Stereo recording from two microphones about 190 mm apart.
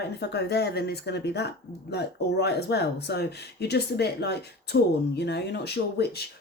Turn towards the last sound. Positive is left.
turn(degrees=60)  # may be behind; listen again after turning